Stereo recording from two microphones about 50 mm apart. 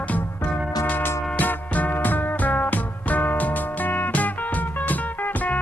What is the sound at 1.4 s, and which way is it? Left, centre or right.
Music, left.